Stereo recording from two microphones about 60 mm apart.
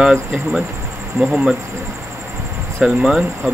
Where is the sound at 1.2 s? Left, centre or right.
Centre.